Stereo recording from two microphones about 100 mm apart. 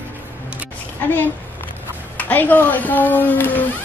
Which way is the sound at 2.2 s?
15° left (ahead or behind).